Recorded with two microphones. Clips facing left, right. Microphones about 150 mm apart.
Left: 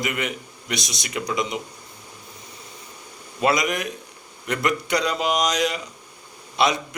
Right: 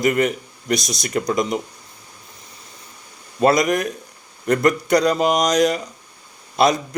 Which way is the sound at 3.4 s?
40° right (ahead or behind).